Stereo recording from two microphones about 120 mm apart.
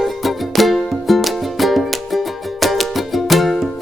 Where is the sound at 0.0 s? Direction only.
Centre (ahead or behind).